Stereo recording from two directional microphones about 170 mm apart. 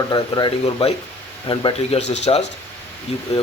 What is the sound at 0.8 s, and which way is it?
Speech, 35° left (ahead or behind).